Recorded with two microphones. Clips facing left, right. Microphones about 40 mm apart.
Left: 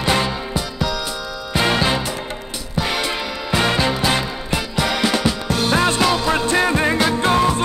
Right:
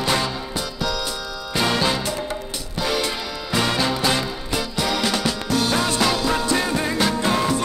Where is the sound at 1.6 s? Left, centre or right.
Left.